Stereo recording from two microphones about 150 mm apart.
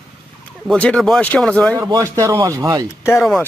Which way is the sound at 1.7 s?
25° right (ahead or behind).